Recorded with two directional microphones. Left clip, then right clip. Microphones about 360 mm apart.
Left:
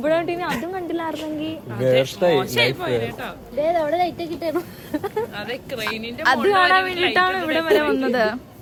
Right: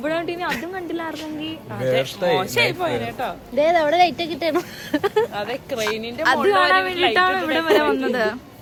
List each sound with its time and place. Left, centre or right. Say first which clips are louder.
0.0 s a woman's voice: left 3 dB; centre
2.3 s speech: even; centre
3.6 s speech: right 4 dB; right
5.4 s speech: right 3 dB; centre
6.2 s a woman's voice: even; centre